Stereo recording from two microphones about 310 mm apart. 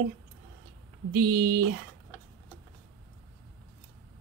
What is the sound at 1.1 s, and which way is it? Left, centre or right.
Speech, right.